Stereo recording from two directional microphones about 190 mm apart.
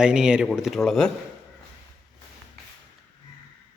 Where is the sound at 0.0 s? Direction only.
5° right (ahead or behind).